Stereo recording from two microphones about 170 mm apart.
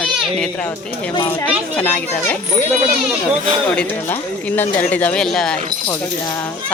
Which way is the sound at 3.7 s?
10° left (ahead or behind).